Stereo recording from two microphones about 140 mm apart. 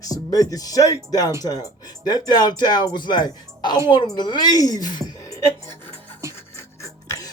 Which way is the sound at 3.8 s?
30° left (ahead or behind).